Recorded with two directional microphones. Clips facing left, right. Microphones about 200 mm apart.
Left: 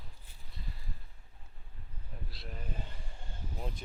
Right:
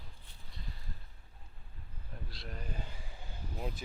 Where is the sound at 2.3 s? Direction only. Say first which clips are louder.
Even; centre (ahead or behind).